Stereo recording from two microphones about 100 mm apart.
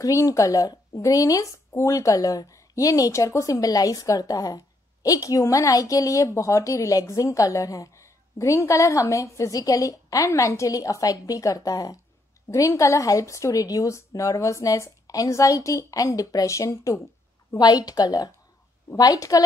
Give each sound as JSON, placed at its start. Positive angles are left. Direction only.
{"t": 0.0, "sound": "speech", "side_deg": 35}